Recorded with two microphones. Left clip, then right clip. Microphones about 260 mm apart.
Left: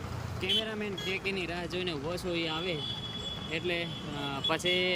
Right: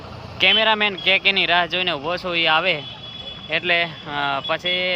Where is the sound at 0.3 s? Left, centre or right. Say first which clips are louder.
Right 16 dB; right.